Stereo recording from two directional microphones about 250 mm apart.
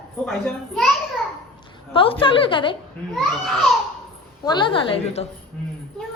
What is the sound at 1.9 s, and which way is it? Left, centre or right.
Speech, left.